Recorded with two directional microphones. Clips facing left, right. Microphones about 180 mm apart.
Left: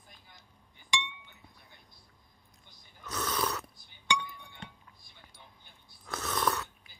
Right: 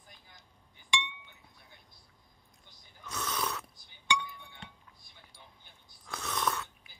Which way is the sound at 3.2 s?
Centre (ahead or behind).